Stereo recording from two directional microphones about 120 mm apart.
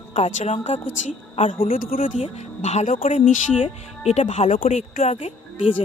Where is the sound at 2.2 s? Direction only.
65° left (ahead or behind); by 3.3 s 90° left.